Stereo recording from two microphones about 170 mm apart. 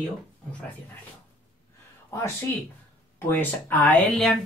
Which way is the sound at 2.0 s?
15° left (ahead or behind).